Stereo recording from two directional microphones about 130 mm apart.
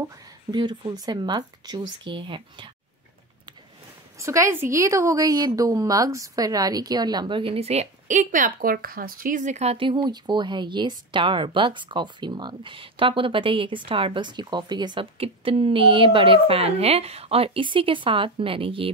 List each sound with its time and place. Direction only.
0.5 s a woman's voice: 35° right (ahead or behind)
4.2 s a woman's voice: 25° right (ahead or behind)
15.1 s a woman's voice: 50° right (ahead or behind)